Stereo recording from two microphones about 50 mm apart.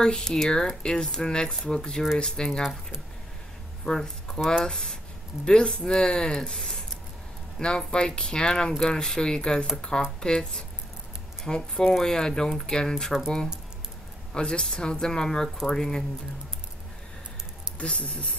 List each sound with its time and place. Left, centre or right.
0.0 s speech: centre
2.6 s speech: centre
3.8 s speech: centre
14.3 s speech: centre
17.7 s speech: left